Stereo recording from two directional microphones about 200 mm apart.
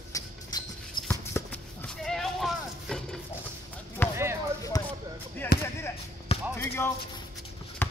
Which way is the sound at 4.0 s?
10° left (ahead or behind).